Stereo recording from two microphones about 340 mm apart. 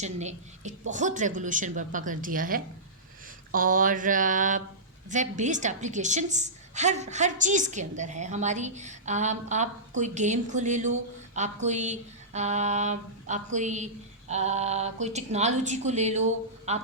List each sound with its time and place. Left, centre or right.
0.0 s a woman's voice: centre